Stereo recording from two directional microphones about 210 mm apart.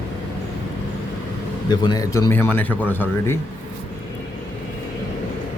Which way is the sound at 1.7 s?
20° left (ahead or behind).